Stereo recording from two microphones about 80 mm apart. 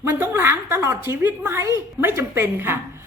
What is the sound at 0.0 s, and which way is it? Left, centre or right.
A woman's voice, right.